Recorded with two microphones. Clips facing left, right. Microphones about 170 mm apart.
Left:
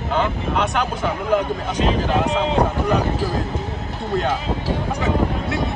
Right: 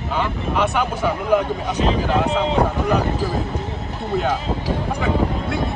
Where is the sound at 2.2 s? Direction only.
15° left (ahead or behind).